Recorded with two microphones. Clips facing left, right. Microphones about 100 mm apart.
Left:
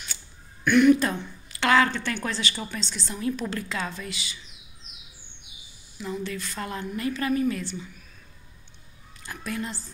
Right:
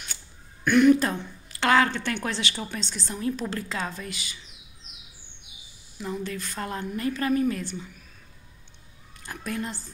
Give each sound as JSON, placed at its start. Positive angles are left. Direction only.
{"t": 0.7, "sound": "a woman's voice", "side_deg": -35}
{"t": 2.7, "sound": "a woman's voice", "side_deg": -50}
{"t": 3.3, "sound": "a woman's voice", "side_deg": -35}
{"t": 6.0, "sound": "a woman's voice", "side_deg": -40}
{"t": 9.2, "sound": "a woman's voice", "side_deg": -45}